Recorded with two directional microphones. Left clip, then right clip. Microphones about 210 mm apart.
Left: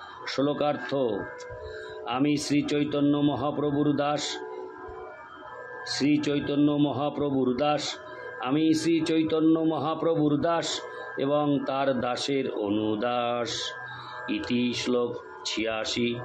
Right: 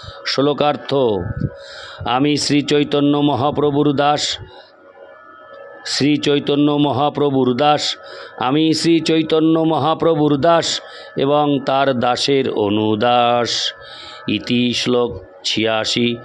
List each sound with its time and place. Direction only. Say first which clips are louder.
0.2 s a man's voice: right 11 dB; 50° right (ahead or behind)
5.9 s a man's voice: right 10 dB; 50° right (ahead or behind)